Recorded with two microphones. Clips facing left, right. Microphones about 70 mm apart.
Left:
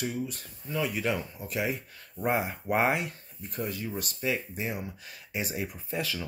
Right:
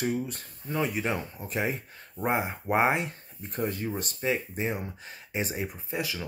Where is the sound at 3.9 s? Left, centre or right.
Right.